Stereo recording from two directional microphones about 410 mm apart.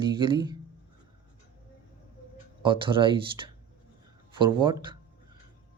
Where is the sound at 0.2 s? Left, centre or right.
Centre.